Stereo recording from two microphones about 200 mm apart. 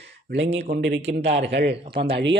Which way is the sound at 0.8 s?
60° right (ahead or behind).